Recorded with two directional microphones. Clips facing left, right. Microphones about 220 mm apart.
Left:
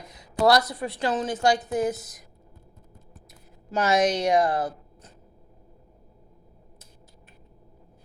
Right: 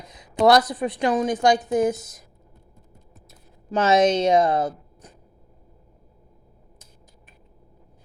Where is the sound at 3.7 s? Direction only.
25° right (ahead or behind).